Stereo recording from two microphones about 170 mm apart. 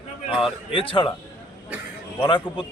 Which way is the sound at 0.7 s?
30° left (ahead or behind).